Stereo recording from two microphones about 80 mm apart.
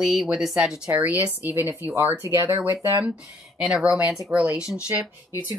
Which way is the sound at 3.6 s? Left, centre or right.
Centre.